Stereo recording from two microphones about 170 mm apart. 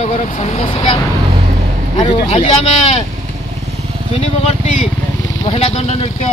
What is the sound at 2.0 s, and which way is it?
Speech, 40° left (ahead or behind).